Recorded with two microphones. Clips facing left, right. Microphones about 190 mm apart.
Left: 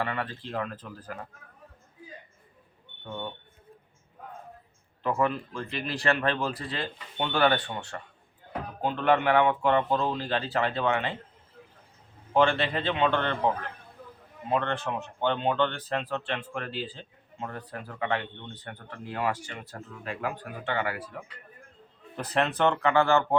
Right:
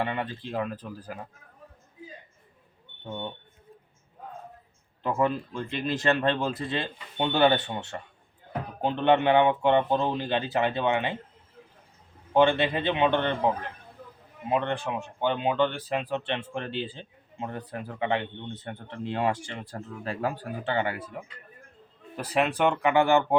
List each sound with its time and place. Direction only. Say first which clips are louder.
0.0 s speech: right 2 dB; 20° right (ahead or behind)
5.0 s speech: right 1 dB; 20° right (ahead or behind)
12.3 s speech: right 2 dB; 20° right (ahead or behind)
22.1 s speech: right 1 dB; 10° right (ahead or behind)